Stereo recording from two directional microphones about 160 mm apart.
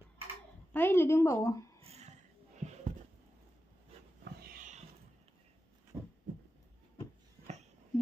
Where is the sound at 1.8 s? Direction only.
40° right (ahead or behind).